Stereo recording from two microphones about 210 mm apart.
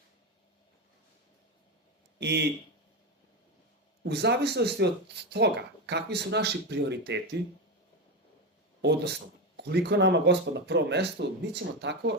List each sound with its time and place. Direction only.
2.1 s speech: 55° right (ahead or behind)
4.0 s speech: 55° right (ahead or behind)
8.8 s speech: 50° right (ahead or behind)